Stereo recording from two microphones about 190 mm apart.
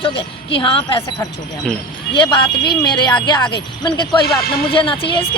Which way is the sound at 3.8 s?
25° left (ahead or behind).